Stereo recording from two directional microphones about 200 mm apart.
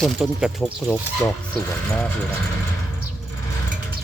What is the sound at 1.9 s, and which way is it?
Speech, 5° left (ahead or behind).